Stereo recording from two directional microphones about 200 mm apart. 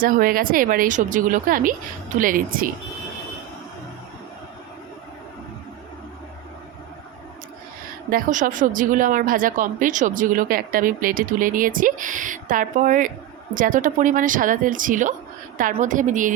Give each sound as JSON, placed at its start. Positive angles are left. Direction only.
{"t": 0.0, "sound": "speech", "side_deg": -45}
{"t": 8.1, "sound": "a woman's voice", "side_deg": -40}